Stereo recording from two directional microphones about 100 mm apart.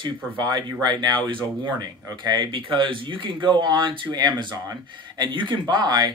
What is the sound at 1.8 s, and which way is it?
Speech, 40° right (ahead or behind).